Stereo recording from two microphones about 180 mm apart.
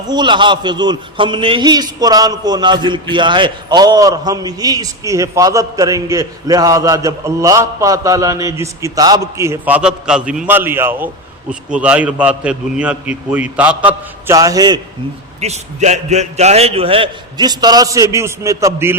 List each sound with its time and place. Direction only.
0.1 s a man's voice: 25° right (ahead or behind); by 13.7 s 10° right (ahead or behind)
14.3 s a man's voice: 20° right (ahead or behind)
15.4 s a man's voice: 40° right (ahead or behind); by 18.9 s 15° right (ahead or behind)